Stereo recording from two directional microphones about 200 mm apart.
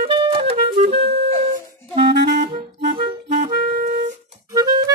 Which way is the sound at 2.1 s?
60° right (ahead or behind).